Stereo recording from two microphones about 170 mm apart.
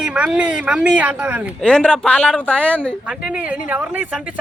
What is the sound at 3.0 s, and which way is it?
Speech, 5° right (ahead or behind).